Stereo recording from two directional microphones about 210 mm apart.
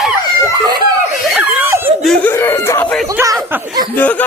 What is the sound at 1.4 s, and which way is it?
Laughter, 10° right (ahead or behind).